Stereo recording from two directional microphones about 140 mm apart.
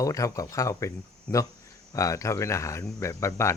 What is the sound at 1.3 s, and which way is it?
Speech, 10° left (ahead or behind).